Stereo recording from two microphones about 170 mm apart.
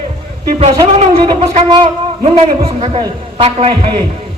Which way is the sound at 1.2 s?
30° right (ahead or behind).